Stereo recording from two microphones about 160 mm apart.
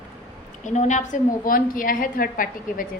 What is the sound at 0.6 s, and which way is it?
A woman's voice, 45° left (ahead or behind).